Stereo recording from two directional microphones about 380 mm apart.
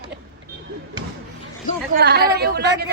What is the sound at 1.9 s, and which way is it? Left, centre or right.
Speech, right.